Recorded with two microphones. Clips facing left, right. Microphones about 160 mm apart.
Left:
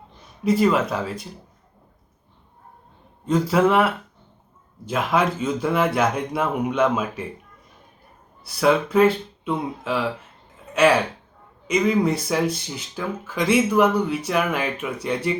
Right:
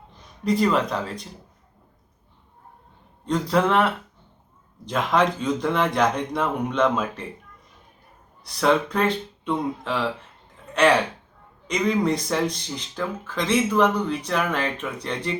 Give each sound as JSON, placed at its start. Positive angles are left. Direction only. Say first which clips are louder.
{"t": 0.4, "sound": "speech", "louder": "left 2 dB", "side_deg": 5}
{"t": 3.2, "sound": "speech", "louder": "left 3 dB", "side_deg": 5}
{"t": 8.4, "sound": "speech", "louder": "left 1 dB", "side_deg": 5}
{"t": 11.7, "sound": "speech", "louder": "left 2 dB", "side_deg": 5}